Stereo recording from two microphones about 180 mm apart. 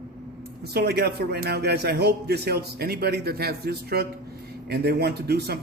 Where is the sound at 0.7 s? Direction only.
60° right (ahead or behind).